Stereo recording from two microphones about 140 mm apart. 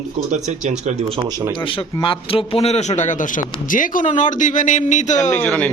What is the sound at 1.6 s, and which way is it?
A man's voice, 35° left (ahead or behind).